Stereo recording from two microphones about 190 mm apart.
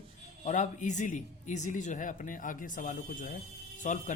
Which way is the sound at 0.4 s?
40° left (ahead or behind).